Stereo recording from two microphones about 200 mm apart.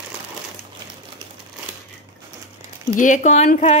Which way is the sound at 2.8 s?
40° left (ahead or behind).